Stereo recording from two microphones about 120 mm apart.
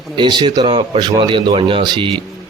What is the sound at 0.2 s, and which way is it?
Speech, 40° right (ahead or behind).